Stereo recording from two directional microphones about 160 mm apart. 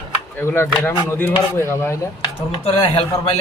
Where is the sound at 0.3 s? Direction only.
15° left (ahead or behind).